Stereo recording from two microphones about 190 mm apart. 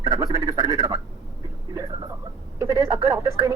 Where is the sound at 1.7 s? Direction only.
15° right (ahead or behind).